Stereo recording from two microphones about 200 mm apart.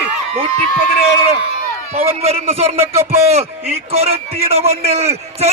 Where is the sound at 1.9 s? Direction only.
30° right (ahead or behind).